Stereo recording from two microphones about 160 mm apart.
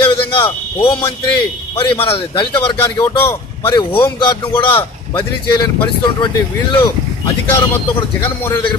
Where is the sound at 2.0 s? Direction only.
35° left (ahead or behind).